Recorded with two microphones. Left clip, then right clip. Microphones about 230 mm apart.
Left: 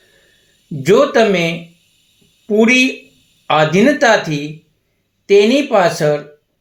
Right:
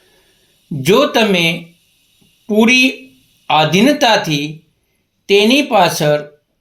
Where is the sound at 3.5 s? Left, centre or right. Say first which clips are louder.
Even; right.